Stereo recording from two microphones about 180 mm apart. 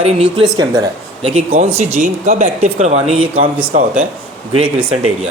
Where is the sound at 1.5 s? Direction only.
40° right (ahead or behind).